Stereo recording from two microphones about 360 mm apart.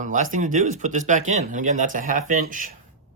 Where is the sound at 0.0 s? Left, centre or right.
Right.